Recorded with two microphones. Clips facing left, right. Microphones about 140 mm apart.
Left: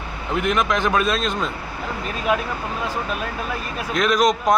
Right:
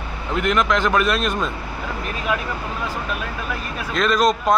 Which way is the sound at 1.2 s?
10° right (ahead or behind).